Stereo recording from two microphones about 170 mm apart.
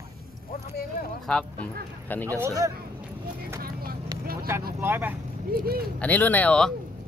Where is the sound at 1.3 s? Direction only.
5° left (ahead or behind).